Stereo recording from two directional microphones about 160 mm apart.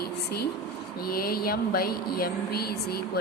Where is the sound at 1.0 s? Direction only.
70° left (ahead or behind).